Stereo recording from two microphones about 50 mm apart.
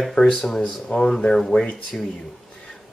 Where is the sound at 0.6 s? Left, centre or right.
Centre.